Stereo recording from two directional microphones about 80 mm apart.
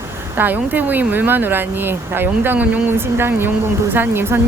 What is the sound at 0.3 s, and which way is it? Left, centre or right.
Speech, right.